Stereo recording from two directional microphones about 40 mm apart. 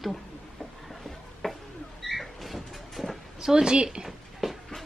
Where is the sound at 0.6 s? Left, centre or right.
Centre.